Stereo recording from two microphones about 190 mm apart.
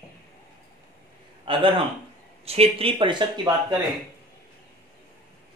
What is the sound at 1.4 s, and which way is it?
A man's voice, 30° right (ahead or behind).